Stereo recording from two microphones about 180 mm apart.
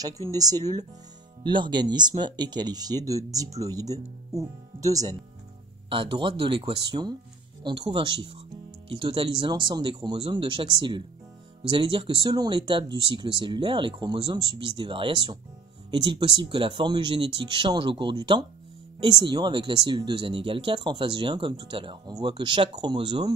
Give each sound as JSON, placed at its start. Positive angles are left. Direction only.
{"t": 0.0, "sound": "speech", "side_deg": -20}